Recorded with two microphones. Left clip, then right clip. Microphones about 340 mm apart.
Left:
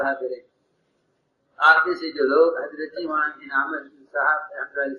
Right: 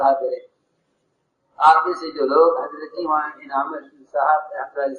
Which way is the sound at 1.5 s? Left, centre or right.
Centre.